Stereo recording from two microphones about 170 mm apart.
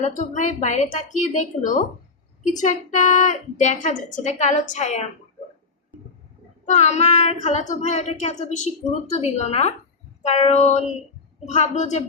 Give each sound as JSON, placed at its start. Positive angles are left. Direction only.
{"t": 0.0, "sound": "a woman's voice", "side_deg": 45}
{"t": 6.7, "sound": "child singing", "side_deg": 40}
{"t": 11.4, "sound": "a woman's voice", "side_deg": 45}